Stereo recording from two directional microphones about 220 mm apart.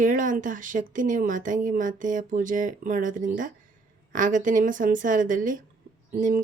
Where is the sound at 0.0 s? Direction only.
35° right (ahead or behind).